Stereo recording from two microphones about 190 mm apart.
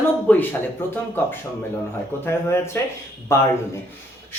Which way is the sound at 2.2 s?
15° left (ahead or behind).